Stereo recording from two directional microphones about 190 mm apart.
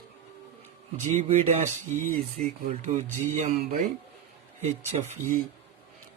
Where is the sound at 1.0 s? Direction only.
40° right (ahead or behind).